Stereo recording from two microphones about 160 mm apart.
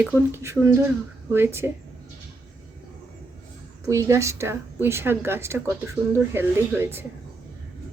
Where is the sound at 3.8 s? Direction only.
20° right (ahead or behind).